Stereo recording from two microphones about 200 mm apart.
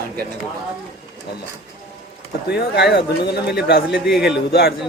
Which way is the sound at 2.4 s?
55° left (ahead or behind).